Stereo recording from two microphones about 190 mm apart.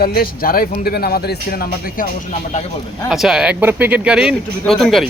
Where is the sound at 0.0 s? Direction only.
55° left (ahead or behind).